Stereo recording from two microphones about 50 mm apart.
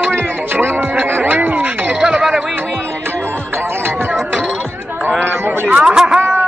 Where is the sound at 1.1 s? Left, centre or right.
Right.